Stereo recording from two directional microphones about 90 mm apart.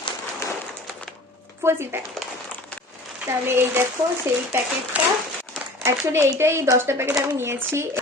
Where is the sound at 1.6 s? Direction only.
30° right (ahead or behind).